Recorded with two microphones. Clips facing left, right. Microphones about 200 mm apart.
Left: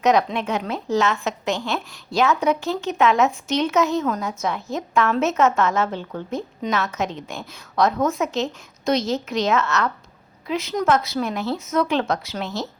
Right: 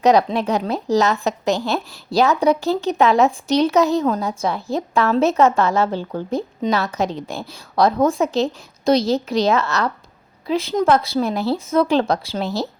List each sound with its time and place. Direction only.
0.0 s a woman's voice: 35° right (ahead or behind)